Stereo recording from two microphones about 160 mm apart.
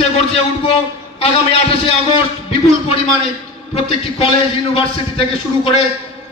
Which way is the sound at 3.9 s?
40° left (ahead or behind).